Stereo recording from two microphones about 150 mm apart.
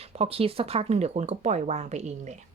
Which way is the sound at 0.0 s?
40° right (ahead or behind).